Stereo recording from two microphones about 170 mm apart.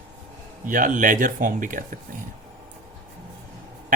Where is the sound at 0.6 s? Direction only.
50° right (ahead or behind).